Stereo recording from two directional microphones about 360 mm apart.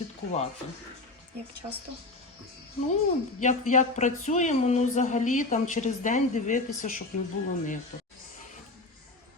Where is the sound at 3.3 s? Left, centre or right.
Centre.